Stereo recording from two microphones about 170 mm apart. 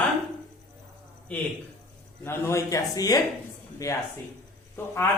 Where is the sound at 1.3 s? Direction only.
10° left (ahead or behind).